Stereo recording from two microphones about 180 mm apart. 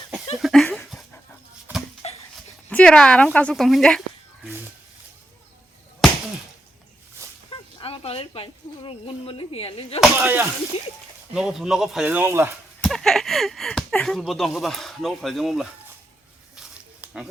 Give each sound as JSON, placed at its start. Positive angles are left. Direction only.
{"t": 0.3, "sound": "a sound", "side_deg": 0}
{"t": 2.0, "sound": "dog", "side_deg": 35}
{"t": 2.6, "sound": "speech", "side_deg": 5}
{"t": 7.5, "sound": "speech", "side_deg": 30}
{"t": 10.2, "sound": "speech", "side_deg": -15}
{"t": 10.7, "sound": "speech", "side_deg": 35}
{"t": 11.3, "sound": "speech", "side_deg": 0}
{"t": 12.0, "sound": "speech", "side_deg": -10}
{"t": 12.8, "sound": "speech", "side_deg": 0}
{"t": 16.6, "sound": "snake", "side_deg": -5}